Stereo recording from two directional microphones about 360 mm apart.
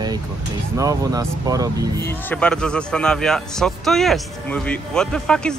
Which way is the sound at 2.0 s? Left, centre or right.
Centre.